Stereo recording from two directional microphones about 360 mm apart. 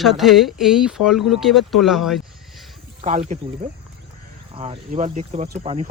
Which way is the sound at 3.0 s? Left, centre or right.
Centre.